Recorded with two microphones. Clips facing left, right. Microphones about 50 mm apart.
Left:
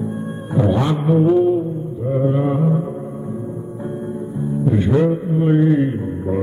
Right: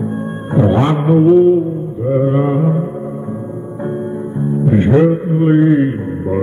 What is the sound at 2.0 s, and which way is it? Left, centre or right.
Mantra, right.